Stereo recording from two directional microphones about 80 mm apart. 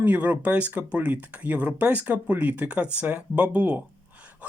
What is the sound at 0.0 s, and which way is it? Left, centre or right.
Speech, right.